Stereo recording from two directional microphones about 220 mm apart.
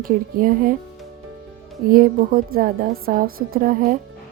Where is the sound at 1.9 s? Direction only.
40° right (ahead or behind).